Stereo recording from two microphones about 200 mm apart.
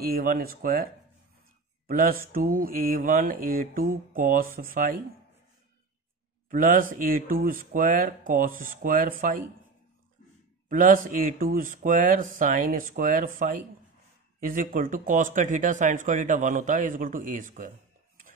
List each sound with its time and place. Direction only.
0.0 s mantra: 45° right (ahead or behind)
1.9 s mantra: 45° right (ahead or behind)
6.5 s mantra: 45° right (ahead or behind)
10.7 s mantra: 40° right (ahead or behind)
14.4 s speech: 45° right (ahead or behind)